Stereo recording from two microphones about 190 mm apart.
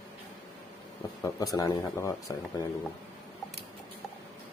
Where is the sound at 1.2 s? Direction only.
20° left (ahead or behind).